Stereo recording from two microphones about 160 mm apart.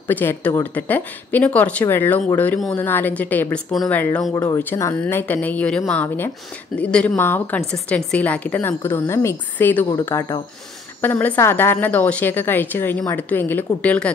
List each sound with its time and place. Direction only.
0.1 s speech: 10° left (ahead or behind)
4.2 s speech: 20° left (ahead or behind)